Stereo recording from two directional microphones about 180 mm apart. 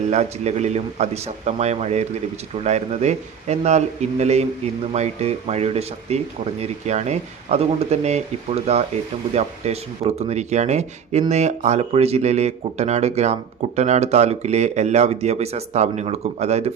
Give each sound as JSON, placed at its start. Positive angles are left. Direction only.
{"t": 0.1, "sound": "speech", "side_deg": -40}